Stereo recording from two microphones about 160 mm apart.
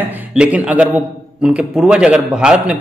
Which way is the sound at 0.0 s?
10° right (ahead or behind).